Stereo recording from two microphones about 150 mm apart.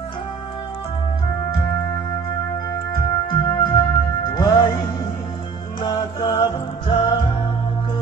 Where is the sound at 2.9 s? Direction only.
20° left (ahead or behind).